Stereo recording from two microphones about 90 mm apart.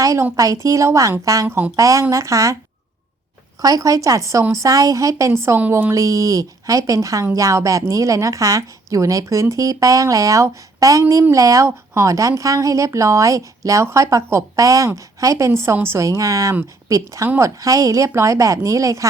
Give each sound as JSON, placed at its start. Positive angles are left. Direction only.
{"t": 0.0, "sound": "a woman's voice", "side_deg": -40}
{"t": 1.5, "sound": "speech", "side_deg": -20}
{"t": 1.7, "sound": "a woman's voice", "side_deg": -35}
{"t": 3.6, "sound": "a woman's voice", "side_deg": -40}
{"t": 17.2, "sound": "speech", "side_deg": -25}
{"t": 17.6, "sound": "a woman's voice", "side_deg": -40}